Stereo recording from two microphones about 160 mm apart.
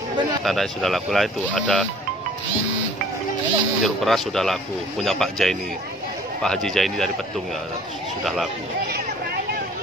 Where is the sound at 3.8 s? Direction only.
Centre (ahead or behind).